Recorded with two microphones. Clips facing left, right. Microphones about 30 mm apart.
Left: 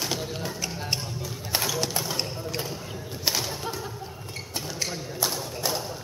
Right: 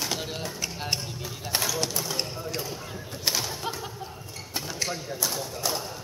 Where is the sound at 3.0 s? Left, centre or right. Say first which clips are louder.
Left 1 dB; centre.